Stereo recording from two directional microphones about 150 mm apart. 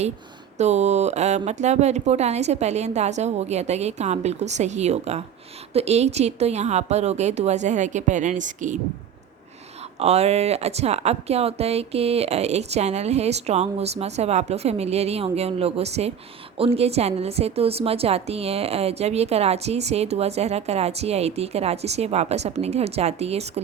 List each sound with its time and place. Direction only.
0.6 s a woman's voice: 50° right (ahead or behind)
10.0 s a woman's voice: 45° right (ahead or behind)